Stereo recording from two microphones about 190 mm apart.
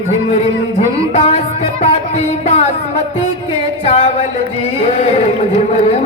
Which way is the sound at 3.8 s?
30° left (ahead or behind).